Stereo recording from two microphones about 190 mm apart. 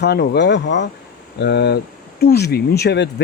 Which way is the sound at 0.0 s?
60° left (ahead or behind).